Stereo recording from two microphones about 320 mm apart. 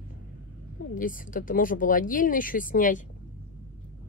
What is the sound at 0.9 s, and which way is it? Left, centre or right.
Speech, left.